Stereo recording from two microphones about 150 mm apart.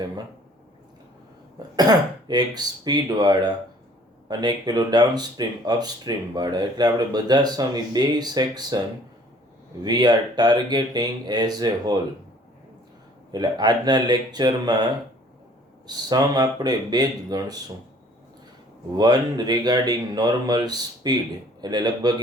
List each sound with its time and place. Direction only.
1.7 s speech: 25° right (ahead or behind)
9.8 s speech: 30° right (ahead or behind)
13.3 s speech: 30° right (ahead or behind)
16.0 s speech: 25° right (ahead or behind)
18.9 s speech: 25° right (ahead or behind)